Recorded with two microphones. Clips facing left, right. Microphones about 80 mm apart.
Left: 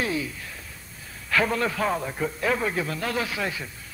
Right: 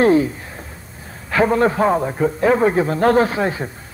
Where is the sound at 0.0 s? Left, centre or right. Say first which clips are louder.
Right 14 dB; right.